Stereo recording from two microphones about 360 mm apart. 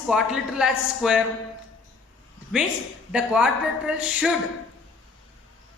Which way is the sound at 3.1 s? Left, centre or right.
Centre.